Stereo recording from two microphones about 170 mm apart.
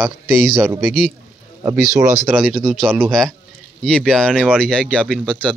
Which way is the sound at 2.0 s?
15° right (ahead or behind).